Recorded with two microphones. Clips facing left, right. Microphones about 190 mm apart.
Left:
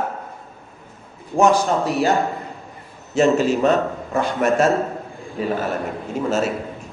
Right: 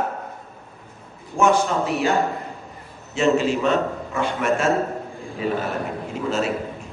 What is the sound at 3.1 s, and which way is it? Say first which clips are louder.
A man's voice: left 3 dB; 40° left (ahead or behind).